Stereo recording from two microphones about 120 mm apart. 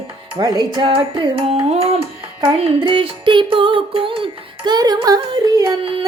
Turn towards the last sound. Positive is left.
turn(degrees=-30)  # may be behind; listen again after turning